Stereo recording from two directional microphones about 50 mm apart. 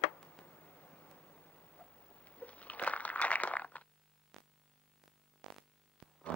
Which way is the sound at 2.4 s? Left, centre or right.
Left.